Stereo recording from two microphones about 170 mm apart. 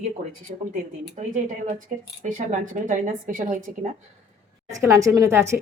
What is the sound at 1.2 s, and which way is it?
A woman's voice, 40° right (ahead or behind).